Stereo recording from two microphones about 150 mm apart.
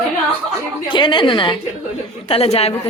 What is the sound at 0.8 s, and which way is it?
A woman's voice, 30° left (ahead or behind).